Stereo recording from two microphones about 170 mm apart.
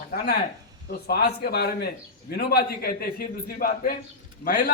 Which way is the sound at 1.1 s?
70° left (ahead or behind).